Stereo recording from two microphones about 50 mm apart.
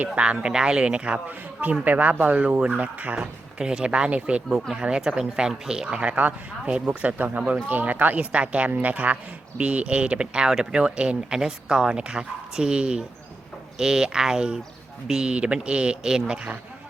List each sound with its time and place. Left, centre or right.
0.0 s a woman's voice: right
3.2 s speech: centre
6.0 s speech: right
7.2 s a woman's voice: right; by 16.6 s centre